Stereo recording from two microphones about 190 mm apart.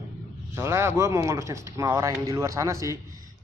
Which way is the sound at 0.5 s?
15° right (ahead or behind).